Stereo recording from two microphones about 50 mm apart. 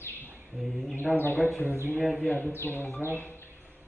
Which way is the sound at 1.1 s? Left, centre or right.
Centre.